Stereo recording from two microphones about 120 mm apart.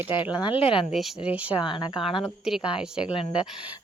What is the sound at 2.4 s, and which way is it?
Speech, 5° right (ahead or behind).